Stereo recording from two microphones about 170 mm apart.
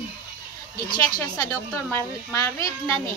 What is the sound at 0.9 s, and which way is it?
A woman's voice, 20° left (ahead or behind).